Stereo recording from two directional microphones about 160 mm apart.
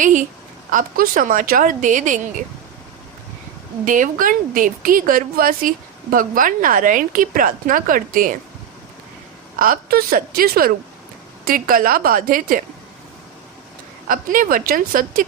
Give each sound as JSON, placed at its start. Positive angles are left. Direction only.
{"t": 0.7, "sound": "a woman's voice", "side_deg": -55}
{"t": 3.8, "sound": "a woman's voice", "side_deg": -55}
{"t": 9.6, "sound": "a woman's voice", "side_deg": -65}
{"t": 14.1, "sound": "a woman's voice", "side_deg": -55}